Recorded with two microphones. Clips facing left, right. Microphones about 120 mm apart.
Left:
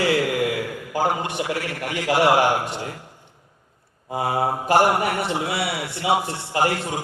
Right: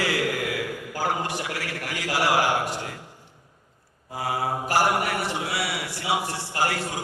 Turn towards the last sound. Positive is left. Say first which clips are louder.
# left 4 dB
turn(degrees=25)  # may be behind; listen again after turning